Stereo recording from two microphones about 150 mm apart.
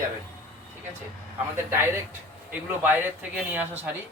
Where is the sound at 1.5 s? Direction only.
15° right (ahead or behind).